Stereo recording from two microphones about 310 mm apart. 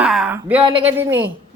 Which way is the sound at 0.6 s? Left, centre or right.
Centre.